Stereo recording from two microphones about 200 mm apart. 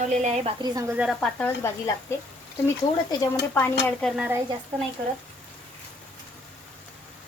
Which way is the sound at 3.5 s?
10° left (ahead or behind).